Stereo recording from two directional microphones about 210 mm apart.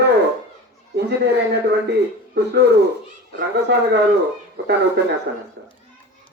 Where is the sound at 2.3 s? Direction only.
50° right (ahead or behind).